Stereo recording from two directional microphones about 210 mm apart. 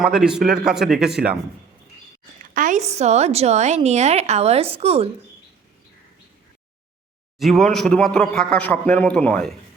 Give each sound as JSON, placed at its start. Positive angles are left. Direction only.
{"t": 0.0, "sound": "a man's voice", "side_deg": -5}
{"t": 2.4, "sound": "a woman's voice", "side_deg": -40}
{"t": 7.3, "sound": "a man's voice", "side_deg": 0}